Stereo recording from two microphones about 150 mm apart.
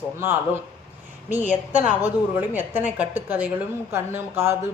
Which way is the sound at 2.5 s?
15° right (ahead or behind).